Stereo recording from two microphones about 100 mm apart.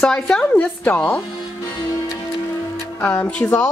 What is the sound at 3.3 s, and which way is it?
Speech, 10° left (ahead or behind).